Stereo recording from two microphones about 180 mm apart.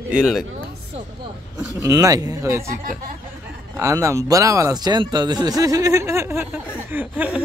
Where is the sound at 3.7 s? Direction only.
15° right (ahead or behind).